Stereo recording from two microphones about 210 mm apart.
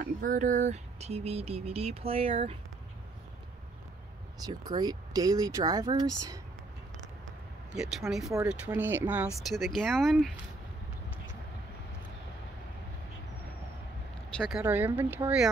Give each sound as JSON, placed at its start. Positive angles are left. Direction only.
{"t": 0.0, "sound": "a sound", "side_deg": -40}
{"t": 4.4, "sound": "speech", "side_deg": -20}
{"t": 7.7, "sound": "speech", "side_deg": -5}
{"t": 14.3, "sound": "speech", "side_deg": 5}
{"t": 14.6, "sound": "speech", "side_deg": -10}